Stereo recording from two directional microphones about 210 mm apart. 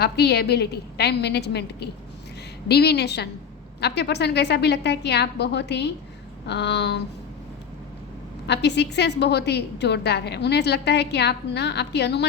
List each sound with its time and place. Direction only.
0.0 s a woman's voice: 50° left (ahead or behind)
8.4 s a woman's voice: 55° left (ahead or behind)